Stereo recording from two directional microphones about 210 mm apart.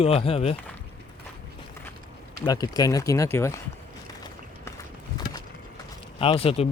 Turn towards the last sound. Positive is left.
turn(degrees=30)  # may be behind; listen again after turning